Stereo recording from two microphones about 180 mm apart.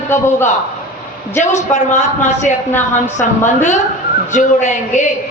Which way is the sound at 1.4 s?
40° left (ahead or behind).